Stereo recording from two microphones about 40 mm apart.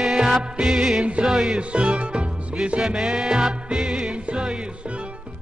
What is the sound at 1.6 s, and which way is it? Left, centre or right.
Music, right.